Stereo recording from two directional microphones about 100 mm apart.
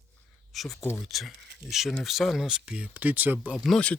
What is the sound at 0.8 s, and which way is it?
Speech, 25° left (ahead or behind).